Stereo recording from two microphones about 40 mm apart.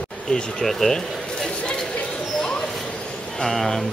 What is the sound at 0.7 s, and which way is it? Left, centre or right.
Speech, centre.